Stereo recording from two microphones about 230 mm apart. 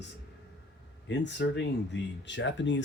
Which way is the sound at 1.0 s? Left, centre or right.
Left.